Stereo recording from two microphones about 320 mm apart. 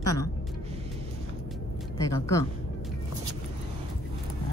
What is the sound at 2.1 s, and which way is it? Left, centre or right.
Speech, centre.